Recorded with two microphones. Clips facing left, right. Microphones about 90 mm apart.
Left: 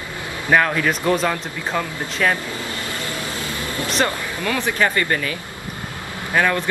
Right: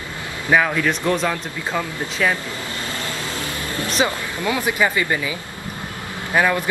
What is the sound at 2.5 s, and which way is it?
Vehicle, 20° right (ahead or behind).